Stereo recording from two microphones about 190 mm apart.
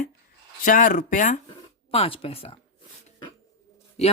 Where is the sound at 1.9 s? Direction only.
30° left (ahead or behind).